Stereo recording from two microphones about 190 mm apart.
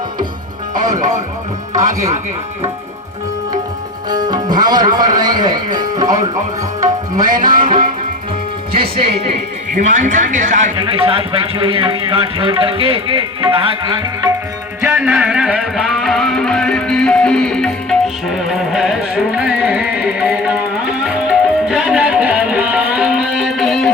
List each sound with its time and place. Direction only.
0.8 s music: 40° right (ahead or behind)
4.1 s a man's voice: 20° right (ahead or behind)
9.0 s speech: 30° right (ahead or behind)
9.7 s speech: 40° right (ahead or behind)
10.8 s speech: 30° right (ahead or behind)
14.8 s music: 10° right (ahead or behind)